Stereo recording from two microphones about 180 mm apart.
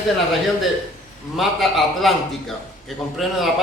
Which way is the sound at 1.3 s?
Centre (ahead or behind).